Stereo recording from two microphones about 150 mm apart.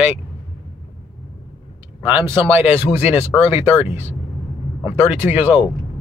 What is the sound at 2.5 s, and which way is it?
Speech, 10° right (ahead or behind).